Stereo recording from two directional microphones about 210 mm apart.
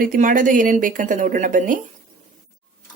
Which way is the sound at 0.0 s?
40° right (ahead or behind).